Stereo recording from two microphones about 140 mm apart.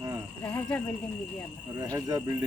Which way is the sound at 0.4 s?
10° left (ahead or behind).